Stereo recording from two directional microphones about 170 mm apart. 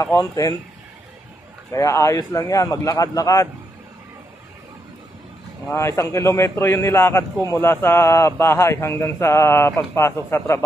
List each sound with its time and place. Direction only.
0.0 s a man's voice: 15° left (ahead or behind)
1.7 s a man's voice: 20° left (ahead or behind)
5.7 s a man's voice: 15° left (ahead or behind)